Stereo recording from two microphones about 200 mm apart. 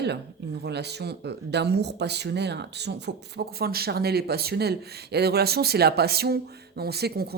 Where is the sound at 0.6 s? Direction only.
55° right (ahead or behind).